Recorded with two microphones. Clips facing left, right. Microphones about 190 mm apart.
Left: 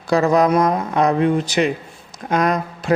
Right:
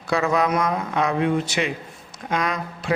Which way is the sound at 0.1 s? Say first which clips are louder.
Left 6 dB; 35° left (ahead or behind).